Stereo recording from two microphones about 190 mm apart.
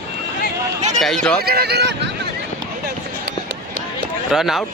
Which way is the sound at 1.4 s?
55° right (ahead or behind).